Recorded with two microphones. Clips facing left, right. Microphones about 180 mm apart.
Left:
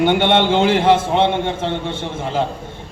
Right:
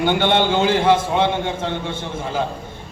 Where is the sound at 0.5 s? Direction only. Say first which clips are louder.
Left 2 dB; 25° left (ahead or behind).